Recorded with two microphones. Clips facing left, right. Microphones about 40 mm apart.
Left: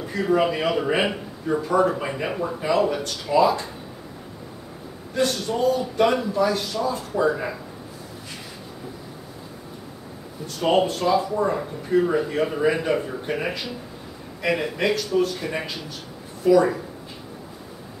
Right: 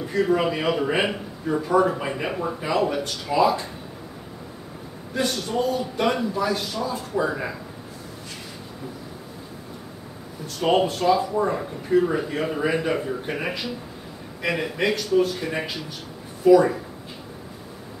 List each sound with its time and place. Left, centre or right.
0.0 s speech: centre
5.1 s speech: centre
10.4 s speech: centre